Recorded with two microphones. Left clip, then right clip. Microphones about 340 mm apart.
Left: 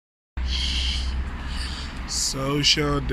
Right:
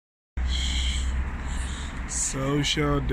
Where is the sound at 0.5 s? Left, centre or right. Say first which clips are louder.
Left 4 dB; centre.